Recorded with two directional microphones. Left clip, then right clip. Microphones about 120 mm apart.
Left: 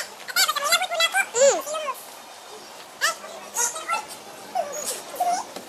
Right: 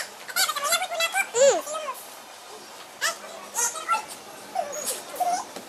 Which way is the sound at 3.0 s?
15° left (ahead or behind).